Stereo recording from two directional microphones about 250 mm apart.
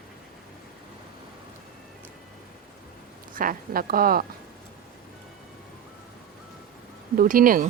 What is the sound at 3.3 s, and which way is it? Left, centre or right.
Speech, right.